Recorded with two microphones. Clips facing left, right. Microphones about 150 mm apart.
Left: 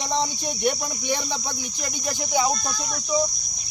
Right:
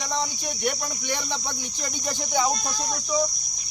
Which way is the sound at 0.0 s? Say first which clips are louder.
Left 3 dB; 25° left (ahead or behind).